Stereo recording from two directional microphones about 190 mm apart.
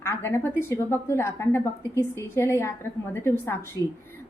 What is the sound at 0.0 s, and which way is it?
A woman's voice, 15° left (ahead or behind).